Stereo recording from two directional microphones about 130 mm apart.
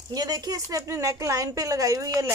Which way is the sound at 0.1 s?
30° right (ahead or behind).